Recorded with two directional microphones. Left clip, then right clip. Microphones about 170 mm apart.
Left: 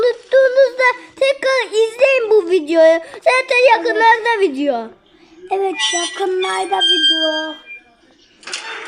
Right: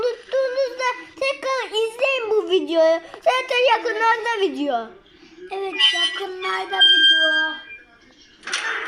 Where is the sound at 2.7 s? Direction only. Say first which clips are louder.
Left 8 dB; 25° left (ahead or behind).